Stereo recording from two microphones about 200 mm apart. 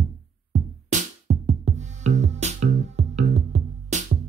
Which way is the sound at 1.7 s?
35° right (ahead or behind).